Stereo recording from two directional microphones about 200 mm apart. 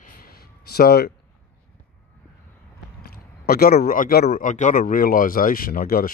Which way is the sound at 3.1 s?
50° left (ahead or behind).